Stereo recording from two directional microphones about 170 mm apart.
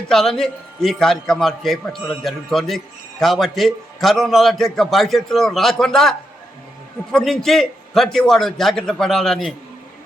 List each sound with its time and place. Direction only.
0.1 s a man's voice: centre (ahead or behind)